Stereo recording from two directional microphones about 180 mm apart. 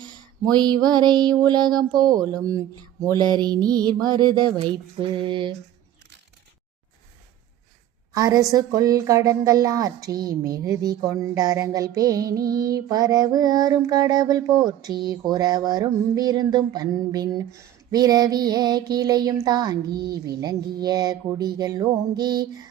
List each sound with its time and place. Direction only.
0.5 s music: 25° right (ahead or behind)
8.1 s music: 20° right (ahead or behind)